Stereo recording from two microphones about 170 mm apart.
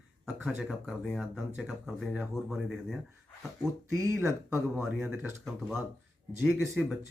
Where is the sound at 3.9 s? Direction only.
15° right (ahead or behind).